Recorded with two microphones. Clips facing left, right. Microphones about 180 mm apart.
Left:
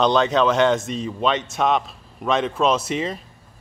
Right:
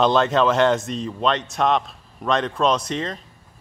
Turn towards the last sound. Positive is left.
turn(degrees=5)  # may be behind; listen again after turning